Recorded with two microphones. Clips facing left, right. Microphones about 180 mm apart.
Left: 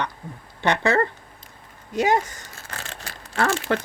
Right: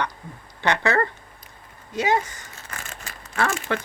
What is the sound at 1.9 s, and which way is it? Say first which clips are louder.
Speech: left 2 dB; 45° left (ahead or behind).